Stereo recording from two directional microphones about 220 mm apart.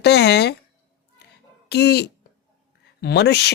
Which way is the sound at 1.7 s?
50° left (ahead or behind).